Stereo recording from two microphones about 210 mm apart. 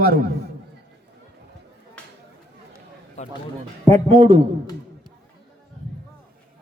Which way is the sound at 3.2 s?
35° left (ahead or behind).